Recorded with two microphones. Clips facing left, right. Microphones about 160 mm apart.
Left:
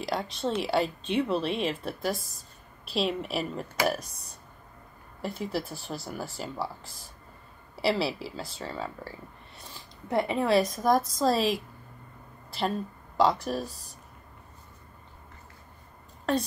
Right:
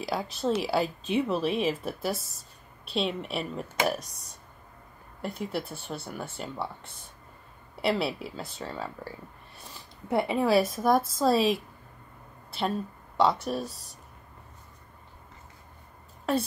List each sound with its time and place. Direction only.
0.0 s a woman's voice: 5° right (ahead or behind)
5.4 s speech: 40° left (ahead or behind)
6.3 s a woman's voice: 5° left (ahead or behind)
7.8 s a woman's voice: centre (ahead or behind)
12.4 s a sound: centre (ahead or behind)
13.2 s a woman's voice: centre (ahead or behind)
16.3 s a woman's voice: 5° right (ahead or behind)